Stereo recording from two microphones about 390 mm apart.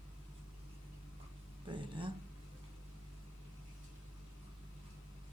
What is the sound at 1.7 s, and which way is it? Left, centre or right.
Speech, centre.